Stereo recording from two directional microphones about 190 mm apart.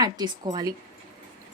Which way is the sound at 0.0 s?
20° right (ahead or behind).